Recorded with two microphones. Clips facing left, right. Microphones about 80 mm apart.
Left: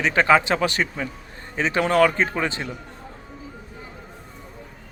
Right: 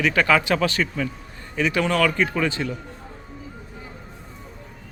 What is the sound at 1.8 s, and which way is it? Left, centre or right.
Speech, left.